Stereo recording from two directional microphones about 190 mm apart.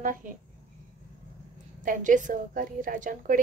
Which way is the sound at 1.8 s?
45° right (ahead or behind).